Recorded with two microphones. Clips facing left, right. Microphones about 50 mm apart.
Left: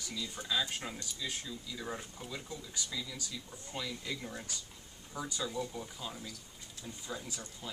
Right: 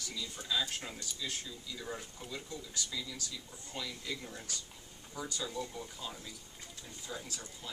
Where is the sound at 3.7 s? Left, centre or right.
Centre.